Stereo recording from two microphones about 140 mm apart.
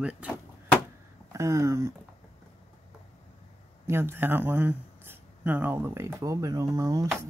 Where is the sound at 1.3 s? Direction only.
20° right (ahead or behind).